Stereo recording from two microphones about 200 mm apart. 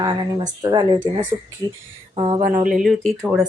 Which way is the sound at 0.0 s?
20° right (ahead or behind).